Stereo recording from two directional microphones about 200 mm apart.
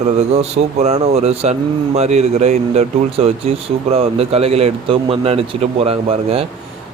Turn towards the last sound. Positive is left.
turn(degrees=-30)  # may be behind; listen again after turning